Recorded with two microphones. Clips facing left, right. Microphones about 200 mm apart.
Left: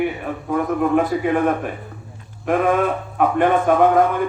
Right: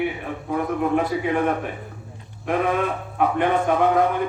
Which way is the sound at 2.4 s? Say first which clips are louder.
Left 4 dB; 50° left (ahead or behind).